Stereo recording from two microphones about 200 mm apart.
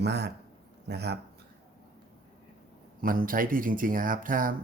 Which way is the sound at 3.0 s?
45° right (ahead or behind).